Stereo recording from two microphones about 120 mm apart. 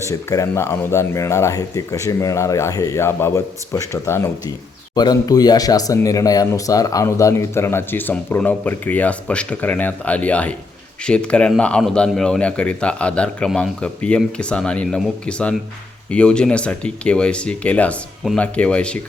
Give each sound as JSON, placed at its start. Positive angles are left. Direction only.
{"t": 0.0, "sound": "speech", "side_deg": 25}
{"t": 4.9, "sound": "a man's voice", "side_deg": 35}